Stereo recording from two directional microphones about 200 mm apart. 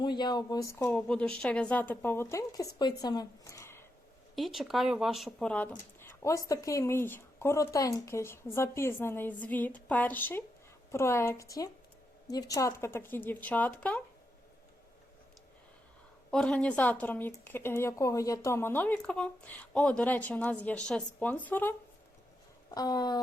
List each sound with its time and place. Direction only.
0.0 s speech: 20° left (ahead or behind)
4.4 s a woman's voice: centre (ahead or behind)
16.3 s speech: 5° left (ahead or behind)
22.7 s speech: 20° left (ahead or behind)